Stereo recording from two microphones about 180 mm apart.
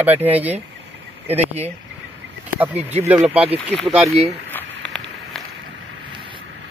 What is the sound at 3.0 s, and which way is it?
Speech, 10° right (ahead or behind).